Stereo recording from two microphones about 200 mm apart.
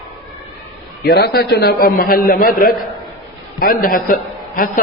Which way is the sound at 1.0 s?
55° left (ahead or behind).